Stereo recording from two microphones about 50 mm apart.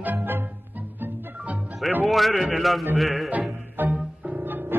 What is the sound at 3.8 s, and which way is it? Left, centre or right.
Music, right.